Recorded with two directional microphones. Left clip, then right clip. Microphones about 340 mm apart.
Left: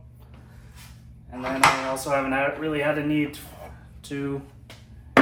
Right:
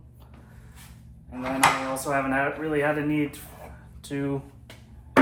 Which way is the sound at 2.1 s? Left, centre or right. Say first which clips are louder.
Left 1 dB; centre.